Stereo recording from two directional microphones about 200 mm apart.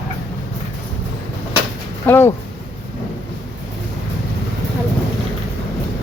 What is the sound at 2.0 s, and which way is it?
Speech, 10° left (ahead or behind).